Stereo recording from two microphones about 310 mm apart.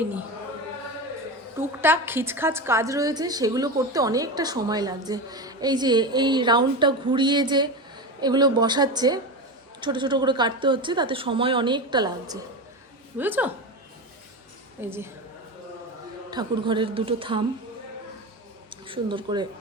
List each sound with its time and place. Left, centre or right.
1.5 s a woman's voice: centre
14.8 s a woman's voice: centre
16.3 s a woman's voice: centre
18.9 s a woman's voice: centre